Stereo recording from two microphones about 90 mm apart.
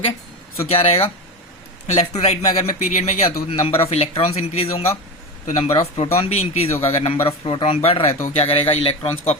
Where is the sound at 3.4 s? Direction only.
90° left.